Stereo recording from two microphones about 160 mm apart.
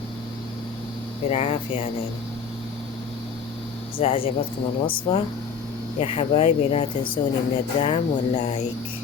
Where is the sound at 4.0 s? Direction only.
35° left (ahead or behind).